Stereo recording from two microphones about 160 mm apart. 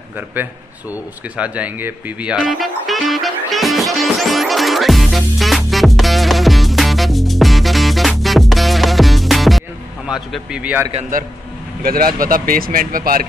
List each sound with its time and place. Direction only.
0.4 s speech: 10° right (ahead or behind)
1.3 s music: 10° right (ahead or behind)
11.8 s speech: 65° right (ahead or behind)